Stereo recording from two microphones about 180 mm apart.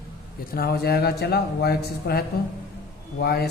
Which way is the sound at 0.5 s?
60° left (ahead or behind).